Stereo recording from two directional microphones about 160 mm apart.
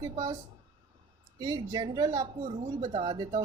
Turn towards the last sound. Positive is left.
turn(degrees=-30)  # may be behind; listen again after turning